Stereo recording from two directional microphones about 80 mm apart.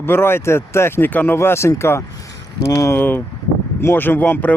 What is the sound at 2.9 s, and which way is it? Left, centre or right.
Speech, left.